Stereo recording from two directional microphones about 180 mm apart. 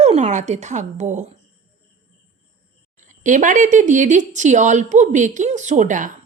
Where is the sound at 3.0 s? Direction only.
45° right (ahead or behind).